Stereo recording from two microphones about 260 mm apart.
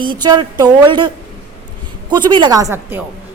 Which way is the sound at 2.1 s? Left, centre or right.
Centre.